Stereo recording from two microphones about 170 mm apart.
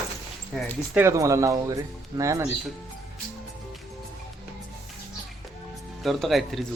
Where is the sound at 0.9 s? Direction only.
15° right (ahead or behind).